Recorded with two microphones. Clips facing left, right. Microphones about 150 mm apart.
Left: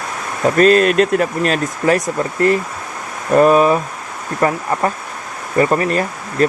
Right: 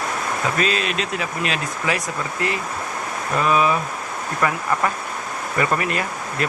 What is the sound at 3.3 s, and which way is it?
Speech, 45° left (ahead or behind).